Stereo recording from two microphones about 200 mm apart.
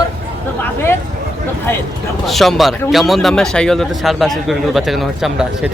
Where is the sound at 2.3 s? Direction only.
Centre (ahead or behind).